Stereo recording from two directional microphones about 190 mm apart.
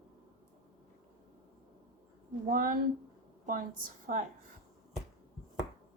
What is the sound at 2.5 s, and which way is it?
Speech, 45° right (ahead or behind).